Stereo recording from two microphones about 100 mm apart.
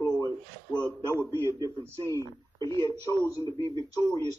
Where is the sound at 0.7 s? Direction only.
10° left (ahead or behind).